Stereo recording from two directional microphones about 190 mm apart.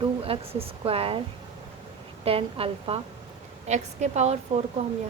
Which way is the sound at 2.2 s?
30° right (ahead or behind).